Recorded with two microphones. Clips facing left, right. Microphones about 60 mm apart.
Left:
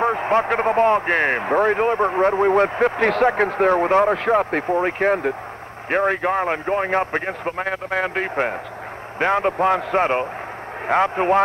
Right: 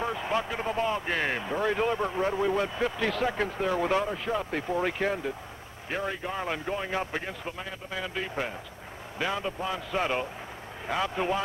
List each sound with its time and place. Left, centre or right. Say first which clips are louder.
0.0 s a man's voice: left 11 dB; left
4.1 s a man's voice: left 12 dB; left
4.7 s a man's voice: left 9 dB; left